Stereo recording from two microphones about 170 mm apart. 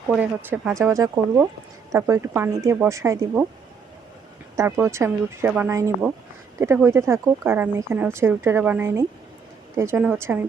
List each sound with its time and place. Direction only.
0.1 s speech: 10° right (ahead or behind)
4.5 s speech: 15° right (ahead or behind)